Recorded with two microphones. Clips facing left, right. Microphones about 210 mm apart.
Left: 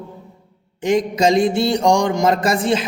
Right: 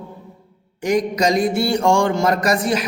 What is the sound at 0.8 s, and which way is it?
Speech, 25° left (ahead or behind).